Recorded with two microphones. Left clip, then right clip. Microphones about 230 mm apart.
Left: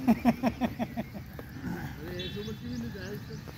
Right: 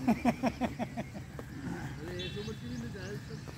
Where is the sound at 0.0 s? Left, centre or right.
Centre.